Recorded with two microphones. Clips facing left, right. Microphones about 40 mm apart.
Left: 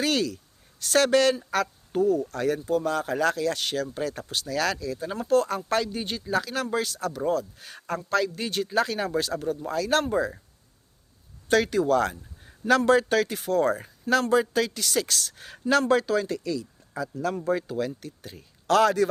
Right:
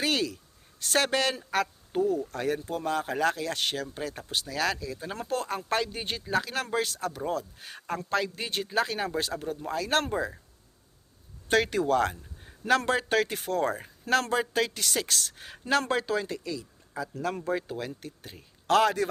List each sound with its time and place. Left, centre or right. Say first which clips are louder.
0.0 s speech: left 3 dB; right
3.9 s speech: left 3 dB; centre
11.4 s speech: left 3 dB; right